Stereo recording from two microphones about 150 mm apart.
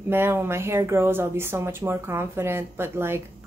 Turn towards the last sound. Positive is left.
turn(degrees=-15)  # may be behind; listen again after turning